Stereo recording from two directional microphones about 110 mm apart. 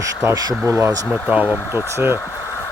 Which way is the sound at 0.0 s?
30° right (ahead or behind).